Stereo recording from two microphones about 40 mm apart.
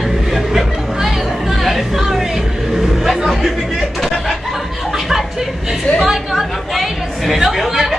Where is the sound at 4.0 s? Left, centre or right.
Centre.